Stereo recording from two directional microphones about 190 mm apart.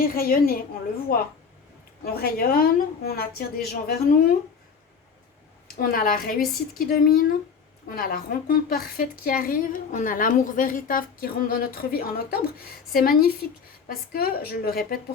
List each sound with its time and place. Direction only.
0.0 s a woman's voice: 50° left (ahead or behind)
5.6 s a woman's voice: 50° left (ahead or behind)